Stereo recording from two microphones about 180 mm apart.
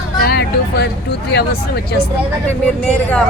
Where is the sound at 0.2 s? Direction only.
65° left (ahead or behind).